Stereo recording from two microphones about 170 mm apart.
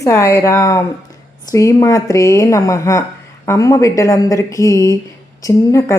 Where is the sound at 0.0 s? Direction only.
15° left (ahead or behind).